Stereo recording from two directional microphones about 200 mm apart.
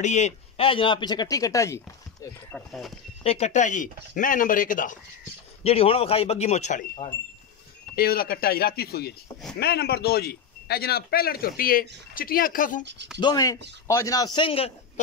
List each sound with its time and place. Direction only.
0.0 s speech: 35° left (ahead or behind); by 1.8 s 15° left (ahead or behind)
2.5 s speech: centre (ahead or behind)
3.3 s speech: 35° left (ahead or behind)
5.6 s speech: 30° left (ahead or behind)
7.9 s speech: 50° left (ahead or behind)
13.2 s speech: 20° left (ahead or behind)